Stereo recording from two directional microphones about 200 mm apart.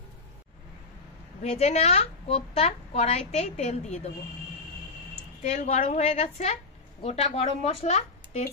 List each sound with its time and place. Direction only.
1.4 s a woman's voice: 35° left (ahead or behind)
5.4 s a woman's voice: 35° left (ahead or behind)